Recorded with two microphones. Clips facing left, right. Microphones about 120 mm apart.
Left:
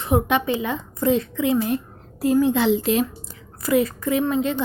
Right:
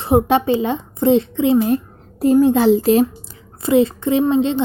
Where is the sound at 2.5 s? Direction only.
40° right (ahead or behind).